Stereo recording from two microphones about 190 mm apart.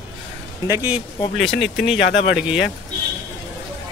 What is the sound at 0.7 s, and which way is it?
Speech, 10° right (ahead or behind).